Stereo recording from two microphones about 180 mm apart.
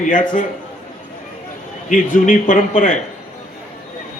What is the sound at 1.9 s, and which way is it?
A man's voice, 45° left (ahead or behind).